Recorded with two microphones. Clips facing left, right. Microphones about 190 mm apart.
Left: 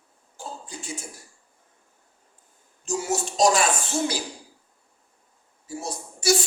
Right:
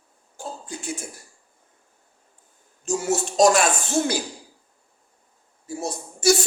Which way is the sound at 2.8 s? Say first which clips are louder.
Right 3 dB; 50° right (ahead or behind).